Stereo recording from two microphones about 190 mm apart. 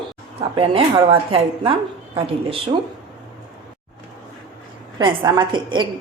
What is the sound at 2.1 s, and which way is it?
Speech, 30° right (ahead or behind).